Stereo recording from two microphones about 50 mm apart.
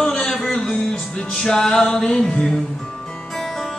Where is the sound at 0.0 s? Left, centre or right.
Centre.